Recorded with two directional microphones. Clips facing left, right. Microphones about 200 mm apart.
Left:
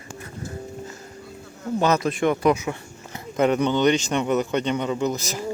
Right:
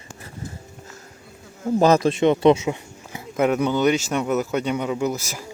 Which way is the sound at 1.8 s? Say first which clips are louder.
Right 4 dB; 35° right (ahead or behind).